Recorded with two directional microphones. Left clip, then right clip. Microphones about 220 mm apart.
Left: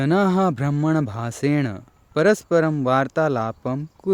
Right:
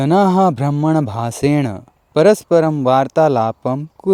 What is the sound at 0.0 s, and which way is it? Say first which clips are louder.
Speech: right 7 dB; 20° right (ahead or behind).